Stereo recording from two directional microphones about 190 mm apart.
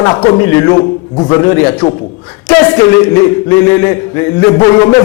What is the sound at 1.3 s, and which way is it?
A man's voice, 15° left (ahead or behind).